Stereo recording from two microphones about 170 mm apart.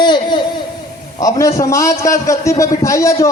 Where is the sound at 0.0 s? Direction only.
25° left (ahead or behind).